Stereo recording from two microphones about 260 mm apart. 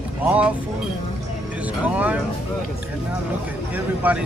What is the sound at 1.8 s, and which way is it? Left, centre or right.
Music, centre.